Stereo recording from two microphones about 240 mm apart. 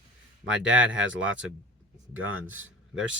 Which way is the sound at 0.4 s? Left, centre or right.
Right.